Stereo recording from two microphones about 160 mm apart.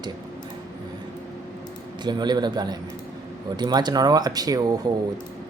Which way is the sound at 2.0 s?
25° right (ahead or behind).